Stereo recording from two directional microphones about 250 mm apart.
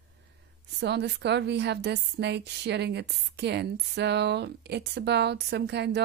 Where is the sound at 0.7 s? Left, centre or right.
Right.